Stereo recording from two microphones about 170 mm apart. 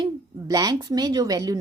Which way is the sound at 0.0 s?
20° right (ahead or behind).